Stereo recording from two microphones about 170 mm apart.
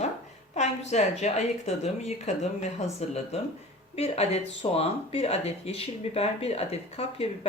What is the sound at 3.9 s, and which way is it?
Speech, 40° left (ahead or behind).